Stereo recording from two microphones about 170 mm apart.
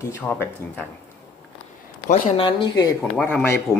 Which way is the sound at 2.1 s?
45° left (ahead or behind).